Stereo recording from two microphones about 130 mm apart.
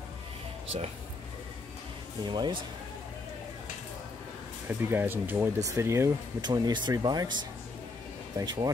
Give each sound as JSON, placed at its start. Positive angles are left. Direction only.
{"t": 2.2, "sound": "speech", "side_deg": -35}
{"t": 4.6, "sound": "speech", "side_deg": -15}
{"t": 6.4, "sound": "speech", "side_deg": -30}